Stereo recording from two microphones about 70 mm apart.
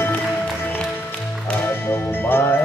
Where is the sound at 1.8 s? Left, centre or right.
Left.